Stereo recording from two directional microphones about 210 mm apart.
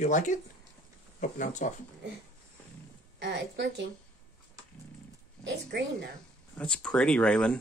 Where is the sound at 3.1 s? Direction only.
55° right (ahead or behind).